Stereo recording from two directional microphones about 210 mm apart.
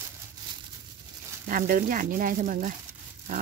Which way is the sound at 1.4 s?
40° right (ahead or behind).